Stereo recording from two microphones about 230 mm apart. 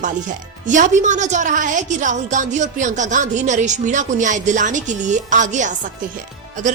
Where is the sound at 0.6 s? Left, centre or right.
Right.